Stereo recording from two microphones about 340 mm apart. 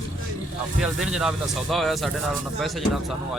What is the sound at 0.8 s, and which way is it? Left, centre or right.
Speech, centre.